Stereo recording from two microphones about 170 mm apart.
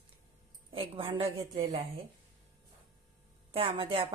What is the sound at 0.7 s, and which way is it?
A woman's voice, 30° right (ahead or behind).